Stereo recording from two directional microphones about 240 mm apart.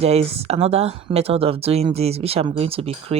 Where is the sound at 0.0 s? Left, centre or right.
Right.